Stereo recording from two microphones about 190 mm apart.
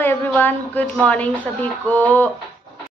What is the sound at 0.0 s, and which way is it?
A woman's voice, 10° left (ahead or behind).